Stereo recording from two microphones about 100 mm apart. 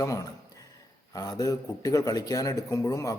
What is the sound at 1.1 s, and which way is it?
Speech, 40° left (ahead or behind).